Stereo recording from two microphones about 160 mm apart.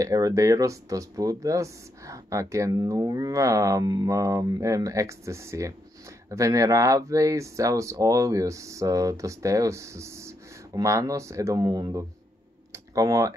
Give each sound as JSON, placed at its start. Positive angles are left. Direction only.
{"t": 0.0, "sound": "speech", "side_deg": -20}
{"t": 12.7, "sound": "clicking", "side_deg": -20}